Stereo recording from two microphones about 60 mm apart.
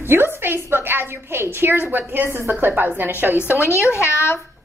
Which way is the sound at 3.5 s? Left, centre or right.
Left.